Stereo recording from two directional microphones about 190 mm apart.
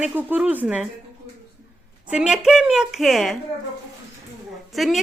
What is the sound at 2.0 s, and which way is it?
A woman's voice, 5° right (ahead or behind).